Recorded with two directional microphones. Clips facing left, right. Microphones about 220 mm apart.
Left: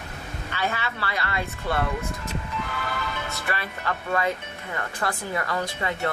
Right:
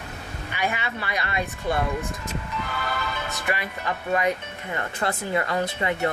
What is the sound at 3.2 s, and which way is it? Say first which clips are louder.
Speech: right 2 dB; 15° right (ahead or behind).